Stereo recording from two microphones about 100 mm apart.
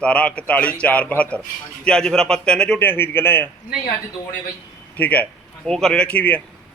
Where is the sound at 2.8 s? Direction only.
20° left (ahead or behind).